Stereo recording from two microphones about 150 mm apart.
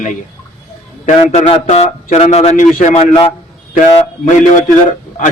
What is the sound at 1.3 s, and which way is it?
A man's voice, 45° left (ahead or behind).